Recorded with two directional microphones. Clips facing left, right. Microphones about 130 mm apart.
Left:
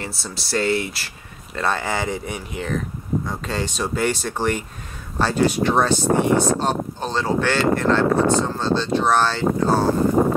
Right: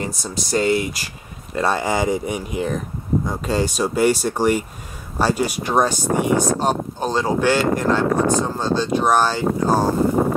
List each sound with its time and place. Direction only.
0.0 s speech: 15° right (ahead or behind)